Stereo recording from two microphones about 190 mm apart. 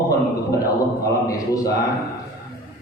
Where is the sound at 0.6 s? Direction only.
20° left (ahead or behind).